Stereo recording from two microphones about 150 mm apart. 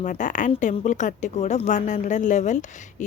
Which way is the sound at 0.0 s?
55° left (ahead or behind).